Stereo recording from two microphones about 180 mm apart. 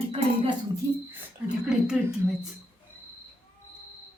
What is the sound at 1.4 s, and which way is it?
Speech, 5° right (ahead or behind).